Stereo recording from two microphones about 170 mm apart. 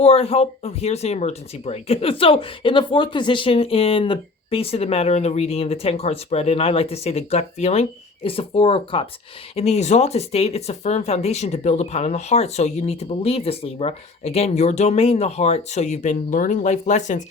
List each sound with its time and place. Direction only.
0.0 s speech: 35° left (ahead or behind)